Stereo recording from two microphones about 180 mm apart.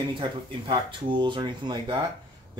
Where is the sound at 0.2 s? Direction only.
25° right (ahead or behind).